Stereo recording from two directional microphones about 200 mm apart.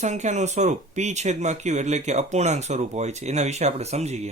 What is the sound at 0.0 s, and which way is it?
Speech, 35° right (ahead or behind).